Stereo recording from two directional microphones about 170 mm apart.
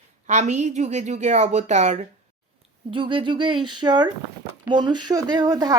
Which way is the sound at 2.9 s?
30° right (ahead or behind).